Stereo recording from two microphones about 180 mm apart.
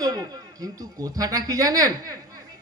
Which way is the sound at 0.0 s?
20° right (ahead or behind).